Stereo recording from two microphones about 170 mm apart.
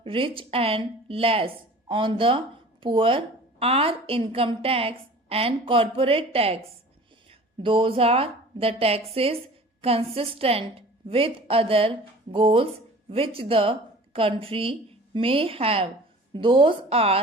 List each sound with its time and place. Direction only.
0.0 s a woman's voice: 30° right (ahead or behind)